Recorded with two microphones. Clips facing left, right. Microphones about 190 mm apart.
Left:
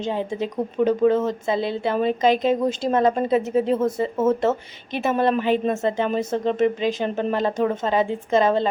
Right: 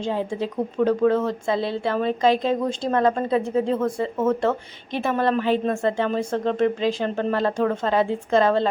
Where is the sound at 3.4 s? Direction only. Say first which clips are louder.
Left 1 dB; 5° left (ahead or behind).